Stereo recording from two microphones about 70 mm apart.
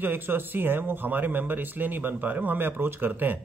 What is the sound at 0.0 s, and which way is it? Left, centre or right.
Speech, right.